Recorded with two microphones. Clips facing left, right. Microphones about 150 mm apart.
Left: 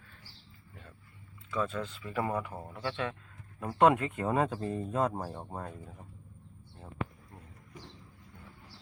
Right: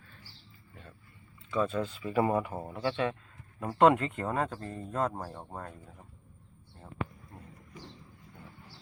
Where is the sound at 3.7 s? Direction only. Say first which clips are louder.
Right 1 dB; 10° left (ahead or behind).